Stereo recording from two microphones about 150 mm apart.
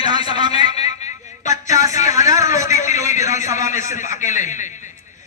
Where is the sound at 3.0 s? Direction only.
55° left (ahead or behind).